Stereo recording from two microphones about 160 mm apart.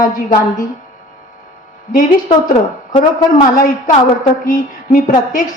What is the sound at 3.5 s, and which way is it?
A woman's voice, 60° left (ahead or behind).